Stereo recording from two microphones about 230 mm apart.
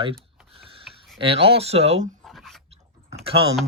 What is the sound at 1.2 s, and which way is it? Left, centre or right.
Speech, right.